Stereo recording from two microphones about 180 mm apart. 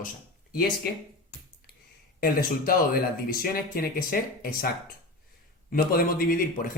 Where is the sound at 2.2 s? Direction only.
55° left (ahead or behind).